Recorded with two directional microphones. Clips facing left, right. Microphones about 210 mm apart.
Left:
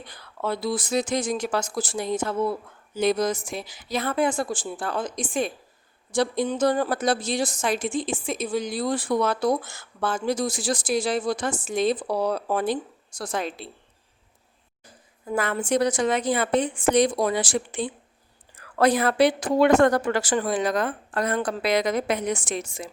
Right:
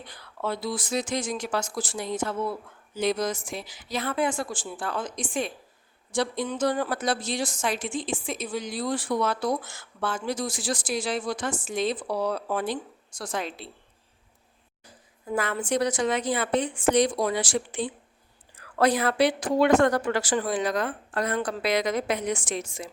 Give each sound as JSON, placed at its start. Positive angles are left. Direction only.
{"t": 0.1, "sound": "a woman's voice", "side_deg": 40}
{"t": 15.4, "sound": "speech", "side_deg": 50}